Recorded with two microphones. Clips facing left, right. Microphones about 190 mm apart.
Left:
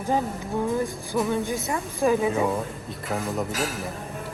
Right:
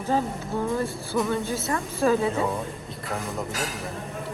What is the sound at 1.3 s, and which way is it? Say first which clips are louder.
A woman's voice: left 1 dB; 15° left (ahead or behind).